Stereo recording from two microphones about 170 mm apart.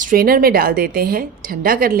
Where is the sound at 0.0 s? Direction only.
55° right (ahead or behind).